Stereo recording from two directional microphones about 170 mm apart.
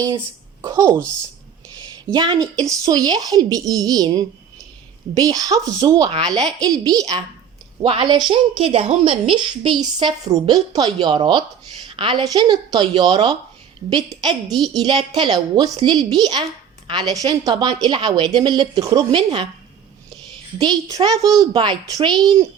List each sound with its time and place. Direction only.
0.6 s a sound: 25° right (ahead or behind)
0.9 s speech: 10° left (ahead or behind)
2.1 s a woman's voice: 25° right (ahead or behind)
9.8 s a woman's voice: 25° right (ahead or behind)
14.4 s a child's voice: centre (ahead or behind)
14.7 s a woman's voice: 25° right (ahead or behind)
20.6 s a woman's voice: 20° right (ahead or behind)